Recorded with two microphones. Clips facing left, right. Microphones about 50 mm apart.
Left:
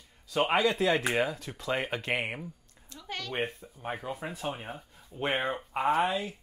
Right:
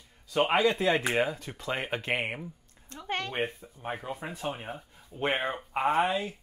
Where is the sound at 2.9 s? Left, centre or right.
Right.